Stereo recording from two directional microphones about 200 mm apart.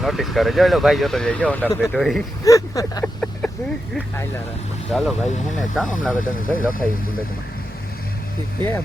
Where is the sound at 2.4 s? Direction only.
15° left (ahead or behind).